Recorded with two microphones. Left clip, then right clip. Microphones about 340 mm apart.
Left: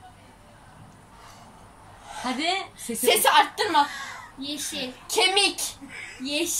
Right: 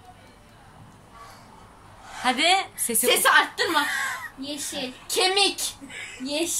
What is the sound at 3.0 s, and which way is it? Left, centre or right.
Speech, centre.